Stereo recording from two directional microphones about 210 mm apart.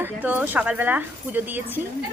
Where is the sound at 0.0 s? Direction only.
10° right (ahead or behind).